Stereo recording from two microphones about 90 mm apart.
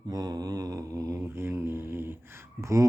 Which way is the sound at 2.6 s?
35° right (ahead or behind).